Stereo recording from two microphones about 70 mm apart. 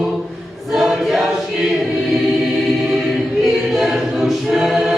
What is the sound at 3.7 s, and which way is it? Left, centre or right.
A capella, centre.